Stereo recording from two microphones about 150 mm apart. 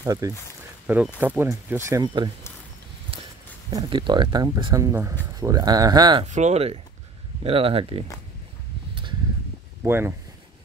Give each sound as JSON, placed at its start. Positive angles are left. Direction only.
{"t": 0.0, "sound": "speech", "side_deg": -25}
{"t": 0.8, "sound": "speech", "side_deg": -10}
{"t": 3.7, "sound": "speech", "side_deg": -30}
{"t": 4.8, "sound": "speech", "side_deg": -20}
{"t": 6.2, "sound": "speech", "side_deg": -50}
{"t": 9.8, "sound": "speech", "side_deg": -15}